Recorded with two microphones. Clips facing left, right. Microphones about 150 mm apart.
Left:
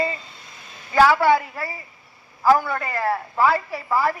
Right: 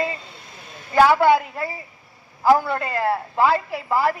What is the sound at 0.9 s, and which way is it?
Speech, 15° right (ahead or behind).